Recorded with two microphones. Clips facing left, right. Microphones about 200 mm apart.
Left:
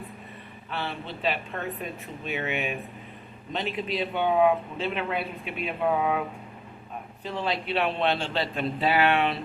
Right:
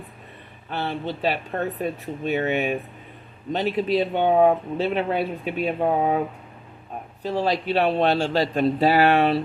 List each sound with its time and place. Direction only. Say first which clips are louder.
0.7 s speech: right 6 dB; 40° right (ahead or behind)